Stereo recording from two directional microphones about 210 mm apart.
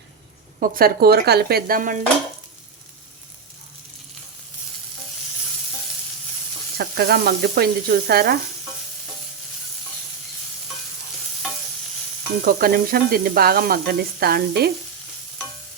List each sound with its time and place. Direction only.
0.6 s sizzle: 45° right (ahead or behind)
6.7 s sizzle: 50° right (ahead or behind)
12.5 s sizzle: 45° right (ahead or behind)